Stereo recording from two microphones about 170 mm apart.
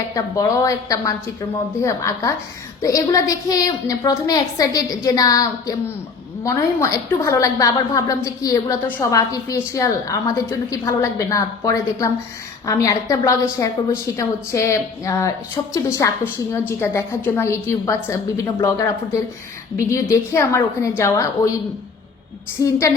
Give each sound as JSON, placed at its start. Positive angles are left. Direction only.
{"t": 0.1, "sound": "a woman's voice", "side_deg": 20}
{"t": 19.9, "sound": "a woman's voice", "side_deg": 15}
{"t": 22.6, "sound": "a woman's voice", "side_deg": 20}